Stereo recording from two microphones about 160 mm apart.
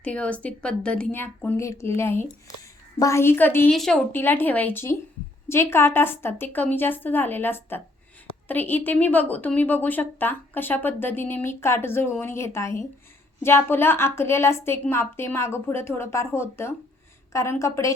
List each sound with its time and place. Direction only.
0.0 s a woman's voice: 10° left (ahead or behind)